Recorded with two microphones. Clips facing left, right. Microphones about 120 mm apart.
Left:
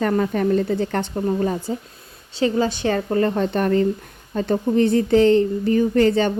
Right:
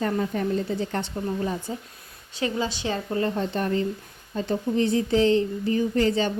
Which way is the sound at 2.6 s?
55° left (ahead or behind).